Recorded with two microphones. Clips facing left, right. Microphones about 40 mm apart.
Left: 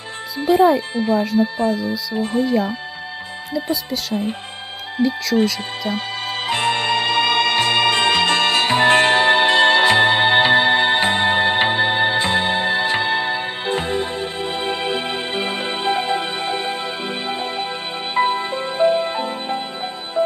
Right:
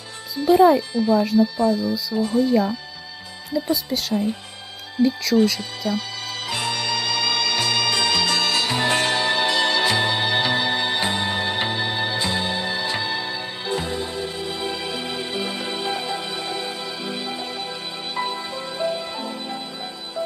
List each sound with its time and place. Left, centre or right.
0.5 s speech: centre
0.8 s speech: left
3.6 s speech: centre
5.0 s speech: centre
5.9 s music: left